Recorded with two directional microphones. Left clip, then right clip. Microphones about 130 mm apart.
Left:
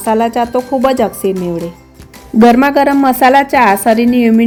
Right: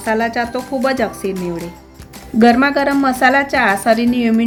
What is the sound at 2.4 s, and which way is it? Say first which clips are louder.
A woman's voice: left 4 dB; 25° left (ahead or behind).